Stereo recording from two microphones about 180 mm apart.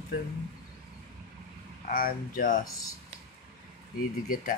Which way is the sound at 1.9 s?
55° left (ahead or behind).